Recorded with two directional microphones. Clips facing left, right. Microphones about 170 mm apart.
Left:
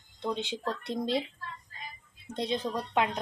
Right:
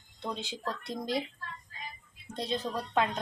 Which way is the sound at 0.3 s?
20° left (ahead or behind).